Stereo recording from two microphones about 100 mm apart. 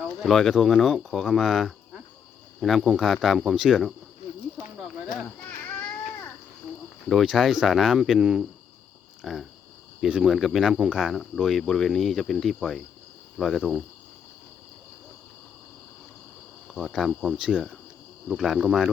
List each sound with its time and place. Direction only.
0.2 s speech: centre (ahead or behind)
5.5 s a sound: 20° left (ahead or behind)
7.1 s speech: centre (ahead or behind)
16.7 s speech: centre (ahead or behind)